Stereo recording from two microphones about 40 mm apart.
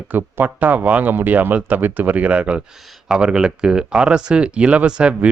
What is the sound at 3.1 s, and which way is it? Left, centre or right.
Speech, right.